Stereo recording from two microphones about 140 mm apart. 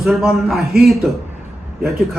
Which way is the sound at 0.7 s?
90° right.